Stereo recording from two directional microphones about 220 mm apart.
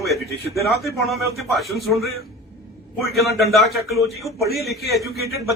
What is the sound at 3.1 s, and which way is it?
A man's voice, centre (ahead or behind).